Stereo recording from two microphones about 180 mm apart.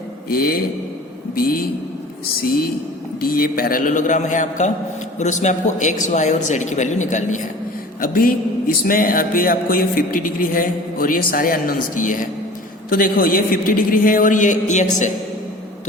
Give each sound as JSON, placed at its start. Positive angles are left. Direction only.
{"t": 0.3, "sound": "a man's voice", "side_deg": 55}
{"t": 3.2, "sound": "speech", "side_deg": 55}